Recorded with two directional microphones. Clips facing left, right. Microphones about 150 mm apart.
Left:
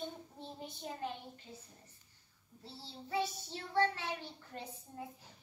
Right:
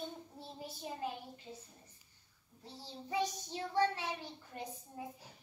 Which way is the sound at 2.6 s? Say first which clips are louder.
Right 1 dB; 15° right (ahead or behind).